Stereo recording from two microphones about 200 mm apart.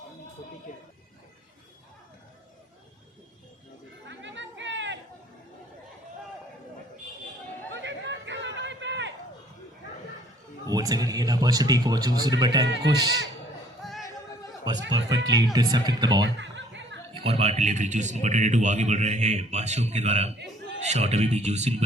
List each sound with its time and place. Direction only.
0.7 s speech: 40° left (ahead or behind)
4.0 s music: 65° right (ahead or behind)
7.7 s chatter: 65° right (ahead or behind)
10.7 s a man's voice: 20° right (ahead or behind)
12.6 s a man's voice: 60° right (ahead or behind)
13.8 s music: centre (ahead or behind)
14.9 s a man's voice: 20° right (ahead or behind)
16.2 s chuckle: 65° right (ahead or behind)
17.2 s speech: 30° right (ahead or behind)